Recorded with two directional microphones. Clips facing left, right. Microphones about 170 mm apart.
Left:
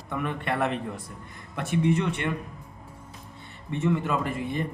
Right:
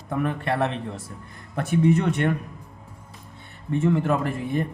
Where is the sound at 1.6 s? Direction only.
50° right (ahead or behind).